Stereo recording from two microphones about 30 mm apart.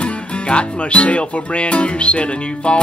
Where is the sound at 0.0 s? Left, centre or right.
Left.